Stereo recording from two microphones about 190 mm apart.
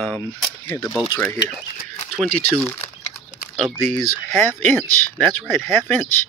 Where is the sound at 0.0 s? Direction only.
10° left (ahead or behind).